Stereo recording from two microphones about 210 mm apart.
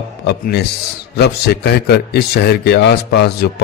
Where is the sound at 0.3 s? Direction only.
50° left (ahead or behind).